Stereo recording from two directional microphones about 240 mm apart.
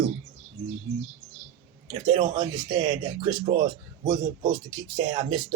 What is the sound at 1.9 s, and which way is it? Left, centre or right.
Speech, right.